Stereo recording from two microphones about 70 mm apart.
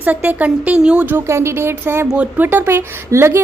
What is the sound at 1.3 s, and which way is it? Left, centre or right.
A woman's voice, right.